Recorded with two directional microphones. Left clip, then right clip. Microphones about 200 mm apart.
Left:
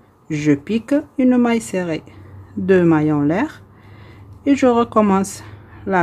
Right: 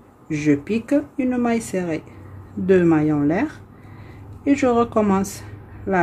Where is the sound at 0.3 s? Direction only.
30° left (ahead or behind).